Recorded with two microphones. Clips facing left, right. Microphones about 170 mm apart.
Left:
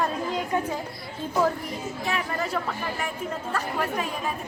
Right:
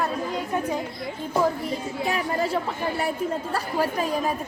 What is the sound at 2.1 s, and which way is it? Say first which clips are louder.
Speech: right 3 dB; 30° right (ahead or behind).